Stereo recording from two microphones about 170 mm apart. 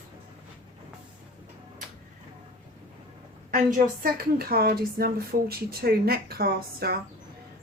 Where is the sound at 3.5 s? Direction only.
55° right (ahead or behind).